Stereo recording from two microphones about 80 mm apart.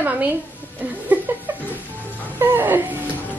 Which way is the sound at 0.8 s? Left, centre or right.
Right.